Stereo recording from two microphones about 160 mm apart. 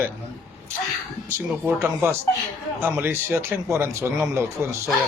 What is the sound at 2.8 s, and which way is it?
Speech, 15° right (ahead or behind).